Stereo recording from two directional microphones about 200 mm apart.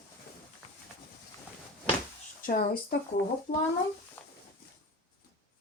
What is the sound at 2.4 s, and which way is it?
Speech, 45° left (ahead or behind).